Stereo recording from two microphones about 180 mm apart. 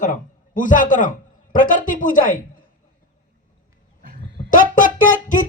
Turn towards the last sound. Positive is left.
turn(degrees=50)  # may be behind; listen again after turning